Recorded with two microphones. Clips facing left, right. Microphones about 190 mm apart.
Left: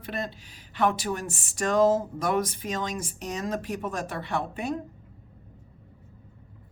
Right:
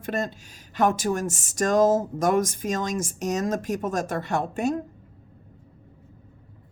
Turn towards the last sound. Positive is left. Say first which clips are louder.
# right 5 dB
turn(degrees=-45)  # may be behind; listen again after turning